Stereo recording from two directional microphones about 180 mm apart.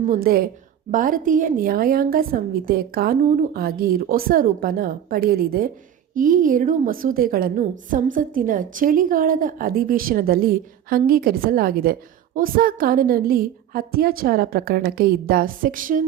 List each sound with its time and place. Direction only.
0.0 s a woman's voice: 50° right (ahead or behind)